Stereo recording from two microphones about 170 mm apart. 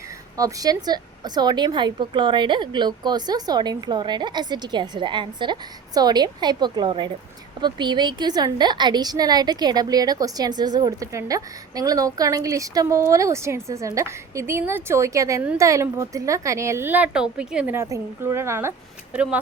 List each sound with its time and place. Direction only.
0.3 s a woman's voice: 20° right (ahead or behind)